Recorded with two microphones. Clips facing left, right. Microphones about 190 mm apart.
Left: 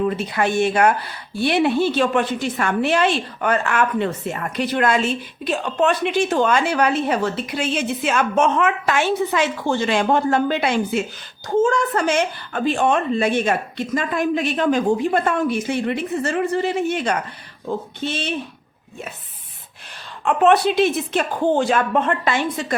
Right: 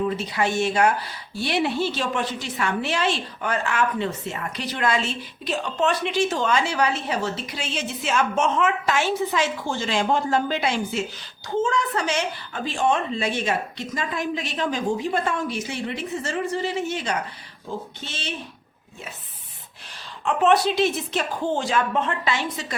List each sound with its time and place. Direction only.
0.2 s speech: 55° left (ahead or behind)
20.2 s speech: 60° left (ahead or behind)